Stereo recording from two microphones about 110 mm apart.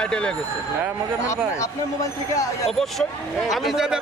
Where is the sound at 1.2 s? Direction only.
30° left (ahead or behind).